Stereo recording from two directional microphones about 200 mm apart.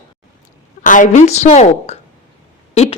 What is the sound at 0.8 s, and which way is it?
A woman's voice, 40° left (ahead or behind).